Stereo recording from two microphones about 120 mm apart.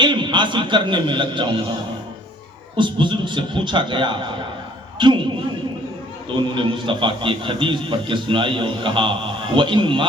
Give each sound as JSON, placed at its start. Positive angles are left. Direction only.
{"t": 0.0, "sound": "a man's voice", "side_deg": -40}
{"t": 2.7, "sound": "a man's voice", "side_deg": -40}
{"t": 6.5, "sound": "a man's voice", "side_deg": -45}